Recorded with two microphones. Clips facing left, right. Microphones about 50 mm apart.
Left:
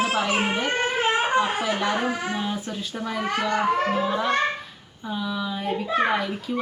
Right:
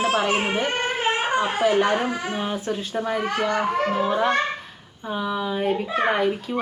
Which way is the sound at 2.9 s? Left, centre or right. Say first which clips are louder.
Right 1 dB; right.